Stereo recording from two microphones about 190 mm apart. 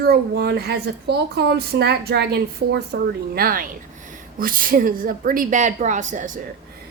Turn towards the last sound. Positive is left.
turn(degrees=-40)  # may be behind; listen again after turning